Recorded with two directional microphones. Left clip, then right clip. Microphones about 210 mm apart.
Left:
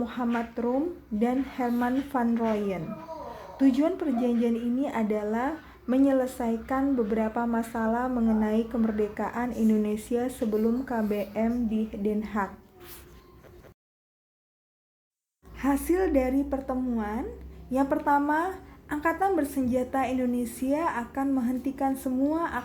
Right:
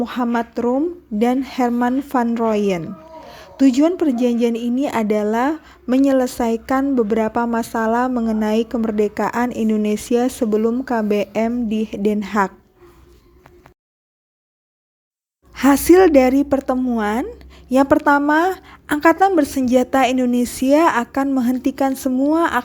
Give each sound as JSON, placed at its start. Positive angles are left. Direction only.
{"t": 0.0, "sound": "a woman's voice", "side_deg": -40}
{"t": 15.5, "sound": "a woman's voice", "side_deg": -45}